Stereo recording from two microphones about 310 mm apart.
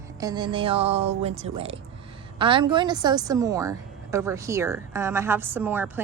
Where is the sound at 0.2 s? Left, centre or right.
Centre.